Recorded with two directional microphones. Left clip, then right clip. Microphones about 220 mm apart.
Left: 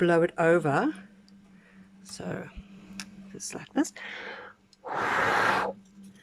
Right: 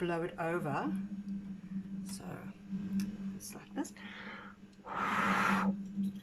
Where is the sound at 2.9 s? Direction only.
45° left (ahead or behind).